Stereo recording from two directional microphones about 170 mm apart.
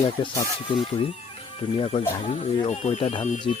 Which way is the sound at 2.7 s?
45° left (ahead or behind).